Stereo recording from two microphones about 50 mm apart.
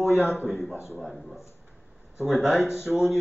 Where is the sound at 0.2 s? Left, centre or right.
Left.